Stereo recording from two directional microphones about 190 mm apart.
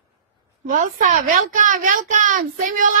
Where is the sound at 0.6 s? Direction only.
40° right (ahead or behind).